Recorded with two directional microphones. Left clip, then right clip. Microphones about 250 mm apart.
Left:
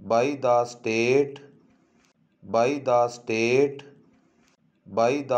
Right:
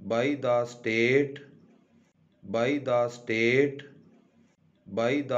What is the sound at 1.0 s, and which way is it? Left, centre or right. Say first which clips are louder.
Speech: left 2 dB; centre.